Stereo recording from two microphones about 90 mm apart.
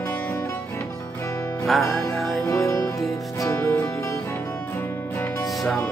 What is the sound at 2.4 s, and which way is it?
Music, 35° left (ahead or behind).